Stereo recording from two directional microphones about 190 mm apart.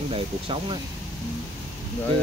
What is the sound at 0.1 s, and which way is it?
Speech, 25° right (ahead or behind).